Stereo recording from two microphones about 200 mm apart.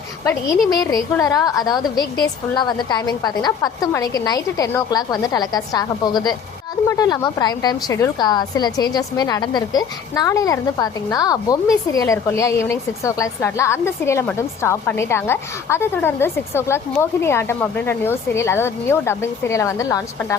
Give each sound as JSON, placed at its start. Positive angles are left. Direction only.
{"t": 0.7, "sound": "a woman's voice", "side_deg": 20}